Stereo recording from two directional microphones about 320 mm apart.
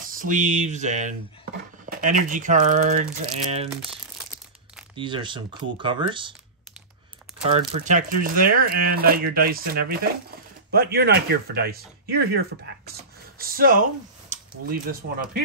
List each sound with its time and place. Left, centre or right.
0.0 s a sound: right
1.9 s speech: right
3.7 s crumpling: centre
4.9 s speech: centre
7.4 s speech: centre